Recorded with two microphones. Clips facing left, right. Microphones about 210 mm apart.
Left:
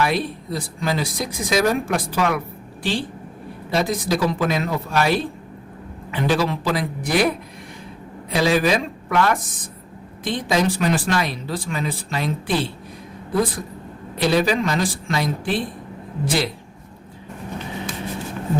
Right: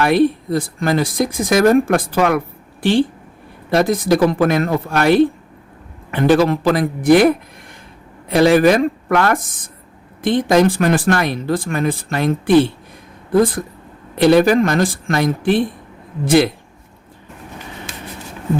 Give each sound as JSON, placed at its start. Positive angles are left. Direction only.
{"t": 0.0, "sound": "speech", "side_deg": -55}
{"t": 3.7, "sound": "speech", "side_deg": -55}
{"t": 14.2, "sound": "speech", "side_deg": -60}